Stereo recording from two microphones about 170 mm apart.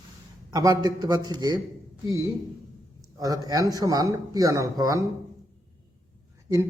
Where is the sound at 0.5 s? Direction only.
20° right (ahead or behind).